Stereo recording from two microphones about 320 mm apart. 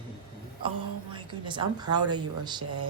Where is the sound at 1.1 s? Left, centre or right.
Centre.